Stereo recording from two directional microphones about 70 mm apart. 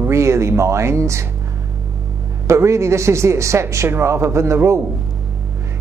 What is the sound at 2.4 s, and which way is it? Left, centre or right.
Speech, right.